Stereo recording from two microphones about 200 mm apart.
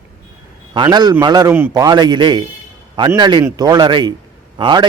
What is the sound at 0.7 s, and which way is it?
A man's voice, 20° right (ahead or behind).